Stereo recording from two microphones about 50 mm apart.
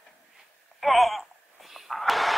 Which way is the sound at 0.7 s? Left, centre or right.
Centre.